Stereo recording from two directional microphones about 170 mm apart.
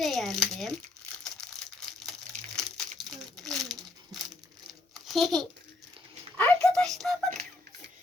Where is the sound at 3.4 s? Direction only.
Centre (ahead or behind).